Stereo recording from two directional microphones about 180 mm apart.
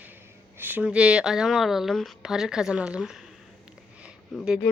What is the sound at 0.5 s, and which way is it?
Speech, 10° right (ahead or behind).